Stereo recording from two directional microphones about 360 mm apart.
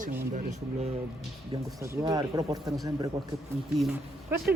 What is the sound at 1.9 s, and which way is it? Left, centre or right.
Speech, centre.